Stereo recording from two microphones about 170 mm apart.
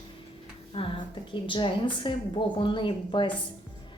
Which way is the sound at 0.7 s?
30° left (ahead or behind).